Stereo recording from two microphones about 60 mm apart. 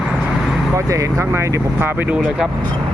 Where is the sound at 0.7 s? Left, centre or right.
Right.